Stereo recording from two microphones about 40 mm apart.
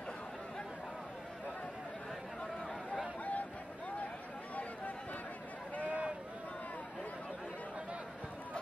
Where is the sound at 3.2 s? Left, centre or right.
Left.